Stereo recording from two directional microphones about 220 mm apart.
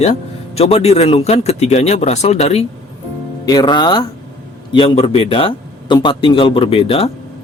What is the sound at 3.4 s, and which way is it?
Speech, 20° left (ahead or behind).